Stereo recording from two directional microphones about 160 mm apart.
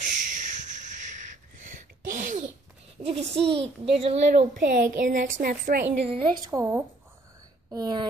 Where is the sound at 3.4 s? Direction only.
35° right (ahead or behind).